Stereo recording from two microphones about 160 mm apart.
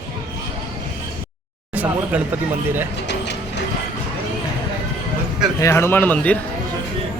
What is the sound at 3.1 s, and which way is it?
Vehicle, 90° left.